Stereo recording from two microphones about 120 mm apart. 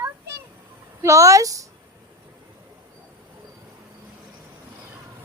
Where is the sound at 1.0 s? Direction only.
25° right (ahead or behind).